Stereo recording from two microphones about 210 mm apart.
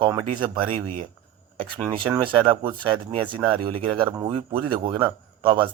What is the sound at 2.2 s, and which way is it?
Speech, 25° right (ahead or behind).